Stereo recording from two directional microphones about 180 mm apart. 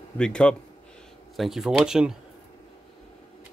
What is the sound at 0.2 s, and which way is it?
Speech, 5° left (ahead or behind).